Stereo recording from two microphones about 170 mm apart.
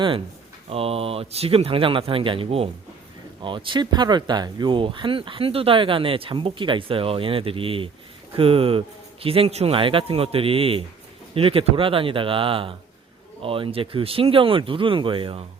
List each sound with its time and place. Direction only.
0.7 s speech: 35° right (ahead or behind)